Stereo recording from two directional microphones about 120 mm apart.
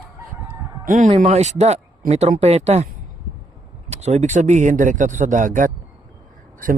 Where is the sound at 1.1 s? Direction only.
60° right (ahead or behind); by 5.7 s 90° right.